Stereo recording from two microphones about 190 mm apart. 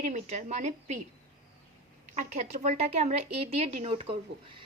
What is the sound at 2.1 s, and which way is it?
A woman's voice, 35° right (ahead or behind).